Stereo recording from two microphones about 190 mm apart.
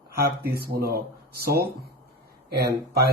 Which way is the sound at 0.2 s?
55° right (ahead or behind).